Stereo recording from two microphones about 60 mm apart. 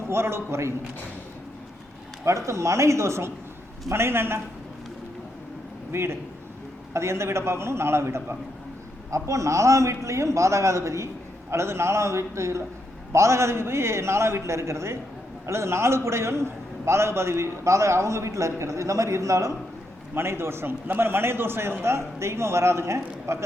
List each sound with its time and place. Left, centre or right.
0.1 s a man's voice: right
2.5 s a man's voice: right
5.9 s a man's voice: right
9.0 s a man's voice: right
20.1 s a man's voice: right